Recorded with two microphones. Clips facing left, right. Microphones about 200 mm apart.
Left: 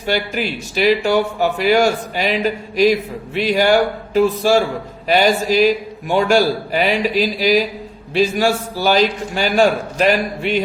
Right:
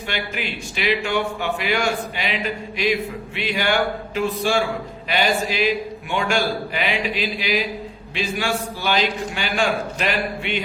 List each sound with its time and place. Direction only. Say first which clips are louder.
0.0 s a man's voice: left 8 dB; 40° left (ahead or behind)